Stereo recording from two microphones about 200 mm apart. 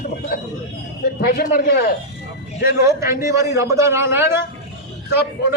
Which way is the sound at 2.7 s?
15° right (ahead or behind).